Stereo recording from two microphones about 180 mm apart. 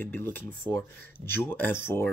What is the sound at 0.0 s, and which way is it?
Speech, 10° left (ahead or behind).